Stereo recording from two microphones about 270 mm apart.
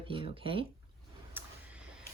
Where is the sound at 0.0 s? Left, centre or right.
Centre.